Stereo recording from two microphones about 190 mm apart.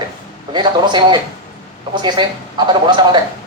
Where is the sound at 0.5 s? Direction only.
25° right (ahead or behind).